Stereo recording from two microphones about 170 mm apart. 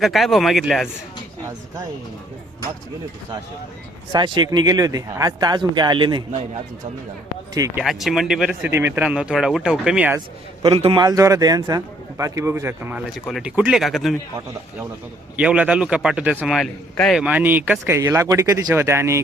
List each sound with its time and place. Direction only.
0.0 s speech: centre (ahead or behind)
4.1 s a man's voice: 25° right (ahead or behind)
7.8 s speech: centre (ahead or behind)
10.6 s a man's voice: 35° right (ahead or behind); by 13.0 s 15° right (ahead or behind)
13.1 s speech: centre (ahead or behind)
15.4 s a man's voice: 5° right (ahead or behind)